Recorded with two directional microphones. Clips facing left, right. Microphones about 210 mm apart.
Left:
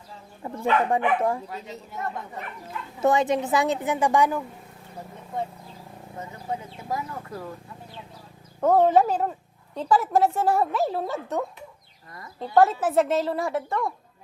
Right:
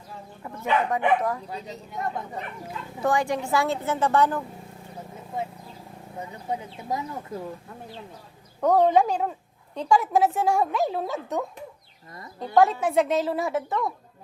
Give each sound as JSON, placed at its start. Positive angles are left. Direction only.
{"t": 0.4, "sound": "a woman's voice", "side_deg": 30}
{"t": 1.5, "sound": "a woman's voice", "side_deg": 0}
{"t": 3.0, "sound": "a woman's voice", "side_deg": 20}
{"t": 6.1, "sound": "speech", "side_deg": -15}
{"t": 8.6, "sound": "a woman's voice", "side_deg": 5}
{"t": 12.5, "sound": "a woman's voice", "side_deg": 0}